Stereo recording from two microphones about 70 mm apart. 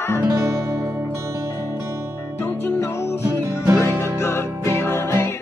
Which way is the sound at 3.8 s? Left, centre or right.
Left.